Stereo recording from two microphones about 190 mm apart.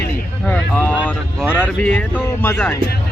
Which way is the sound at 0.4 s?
5° left (ahead or behind).